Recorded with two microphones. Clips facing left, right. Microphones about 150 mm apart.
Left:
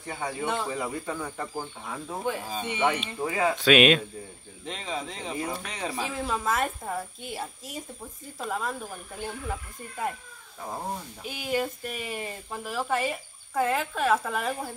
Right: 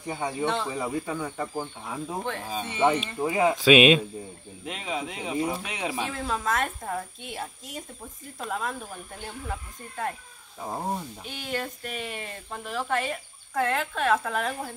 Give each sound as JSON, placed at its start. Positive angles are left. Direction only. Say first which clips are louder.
{"t": 0.0, "sound": "speech", "louder": "right 3 dB", "side_deg": -15}
{"t": 2.2, "sound": "speech", "louder": "left 2 dB", "side_deg": 10}
{"t": 2.8, "sound": "speech", "louder": "right 4 dB", "side_deg": -15}
{"t": 3.5, "sound": "speech", "louder": "right 2 dB", "side_deg": -5}
{"t": 10.6, "sound": "speech", "louder": "right 2 dB", "side_deg": -15}
{"t": 11.2, "sound": "speech", "louder": "left 6 dB", "side_deg": 5}